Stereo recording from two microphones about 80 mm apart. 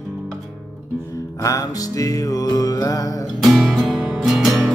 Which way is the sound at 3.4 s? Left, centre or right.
Centre.